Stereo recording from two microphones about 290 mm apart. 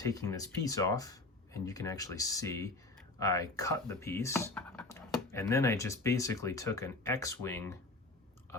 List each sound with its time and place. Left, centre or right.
0.0 s speech: centre